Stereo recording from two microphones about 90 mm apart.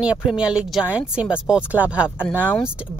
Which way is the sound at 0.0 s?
10° right (ahead or behind).